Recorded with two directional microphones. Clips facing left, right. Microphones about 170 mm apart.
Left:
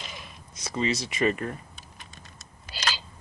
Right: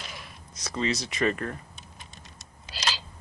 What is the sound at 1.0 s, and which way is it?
Speech, 5° left (ahead or behind).